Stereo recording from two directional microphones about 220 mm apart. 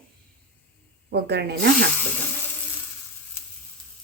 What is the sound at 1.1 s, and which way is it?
Speech, 50° right (ahead or behind).